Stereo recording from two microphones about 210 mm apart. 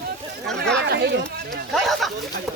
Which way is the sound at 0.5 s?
55° right (ahead or behind).